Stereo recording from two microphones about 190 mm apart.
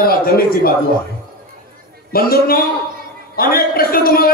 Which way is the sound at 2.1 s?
50° left (ahead or behind).